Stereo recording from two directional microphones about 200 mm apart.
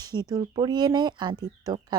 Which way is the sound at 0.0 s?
20° right (ahead or behind).